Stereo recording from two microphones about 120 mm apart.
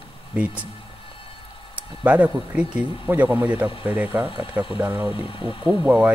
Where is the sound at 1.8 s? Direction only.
10° right (ahead or behind).